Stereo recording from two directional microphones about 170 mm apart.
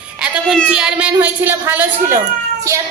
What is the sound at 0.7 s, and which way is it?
A woman's voice, 5° right (ahead or behind).